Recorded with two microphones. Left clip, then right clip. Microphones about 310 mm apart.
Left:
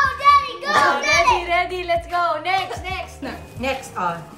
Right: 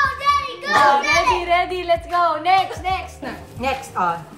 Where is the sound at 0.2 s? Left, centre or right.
Centre.